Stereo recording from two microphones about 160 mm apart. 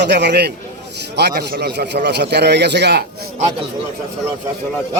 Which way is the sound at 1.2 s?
80° right.